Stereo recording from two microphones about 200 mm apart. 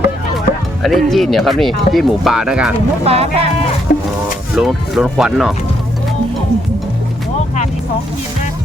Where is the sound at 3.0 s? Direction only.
30° right (ahead or behind).